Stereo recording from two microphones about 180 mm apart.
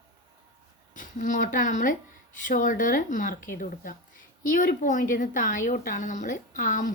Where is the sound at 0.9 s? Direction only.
45° left (ahead or behind).